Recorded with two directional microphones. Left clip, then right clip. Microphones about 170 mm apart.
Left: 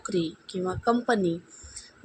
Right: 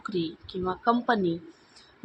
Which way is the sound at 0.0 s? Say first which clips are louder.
Left 2 dB; 20° left (ahead or behind).